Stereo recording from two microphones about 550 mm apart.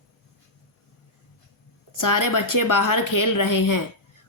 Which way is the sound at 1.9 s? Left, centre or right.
Left.